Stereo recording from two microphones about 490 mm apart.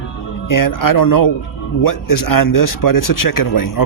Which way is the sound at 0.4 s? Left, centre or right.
Left.